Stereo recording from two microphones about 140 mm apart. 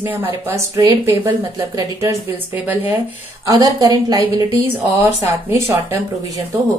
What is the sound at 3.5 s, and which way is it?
Speech, 25° right (ahead or behind).